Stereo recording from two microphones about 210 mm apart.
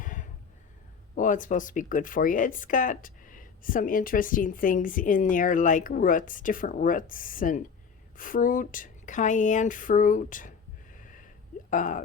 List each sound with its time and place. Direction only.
0.0 s a sound: 40° left (ahead or behind)
1.1 s speech: 40° left (ahead or behind)
11.7 s speech: 40° left (ahead or behind)